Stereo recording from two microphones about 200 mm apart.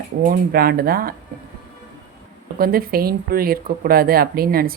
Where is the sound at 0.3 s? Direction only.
50° right (ahead or behind).